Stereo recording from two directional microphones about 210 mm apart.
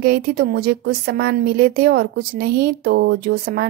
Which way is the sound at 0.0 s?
45° right (ahead or behind).